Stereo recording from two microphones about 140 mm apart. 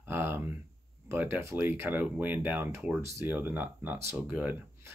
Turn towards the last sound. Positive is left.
turn(degrees=-15)  # may be behind; listen again after turning